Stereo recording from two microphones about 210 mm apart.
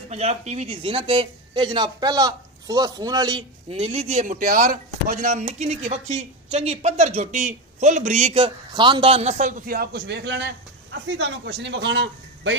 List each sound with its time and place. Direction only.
0.1 s speech: 30° right (ahead or behind); by 12.5 s 55° right (ahead or behind)